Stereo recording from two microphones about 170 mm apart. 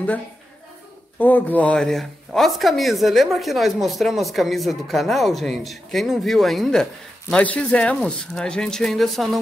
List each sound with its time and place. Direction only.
1.2 s speech: 10° left (ahead or behind)